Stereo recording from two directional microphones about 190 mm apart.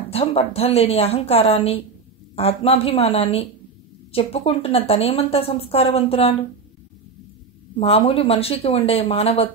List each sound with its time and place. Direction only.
0.1 s speech: 30° left (ahead or behind)
7.8 s speech: 30° left (ahead or behind)